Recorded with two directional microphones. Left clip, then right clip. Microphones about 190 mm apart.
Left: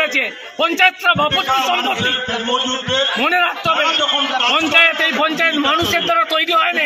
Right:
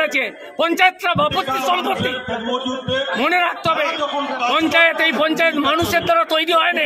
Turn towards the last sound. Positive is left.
turn(degrees=-30)  # may be behind; listen again after turning